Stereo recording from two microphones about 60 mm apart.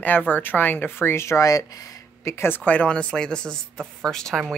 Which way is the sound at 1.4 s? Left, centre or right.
Left.